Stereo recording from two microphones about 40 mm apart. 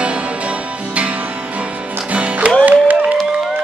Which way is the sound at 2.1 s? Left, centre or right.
Right.